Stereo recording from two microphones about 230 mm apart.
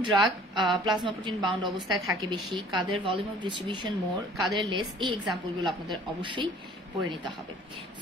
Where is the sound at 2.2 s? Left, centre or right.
Centre.